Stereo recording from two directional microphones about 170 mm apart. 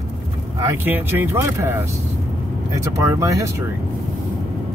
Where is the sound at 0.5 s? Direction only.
15° right (ahead or behind).